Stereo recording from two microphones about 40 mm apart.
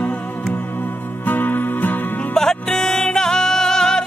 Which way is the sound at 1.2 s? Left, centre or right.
Left.